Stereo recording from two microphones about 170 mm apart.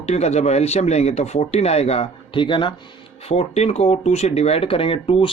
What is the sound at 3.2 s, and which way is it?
Speech, 40° left (ahead or behind).